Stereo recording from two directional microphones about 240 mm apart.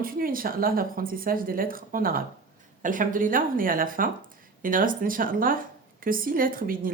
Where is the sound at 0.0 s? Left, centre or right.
Right.